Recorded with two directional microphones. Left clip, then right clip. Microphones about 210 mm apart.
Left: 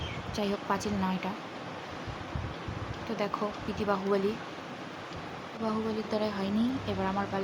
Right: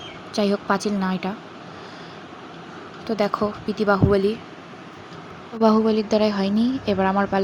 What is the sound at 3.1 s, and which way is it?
Speech, 25° right (ahead or behind).